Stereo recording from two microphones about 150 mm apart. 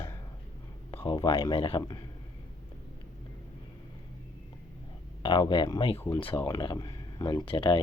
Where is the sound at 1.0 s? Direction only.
30° left (ahead or behind).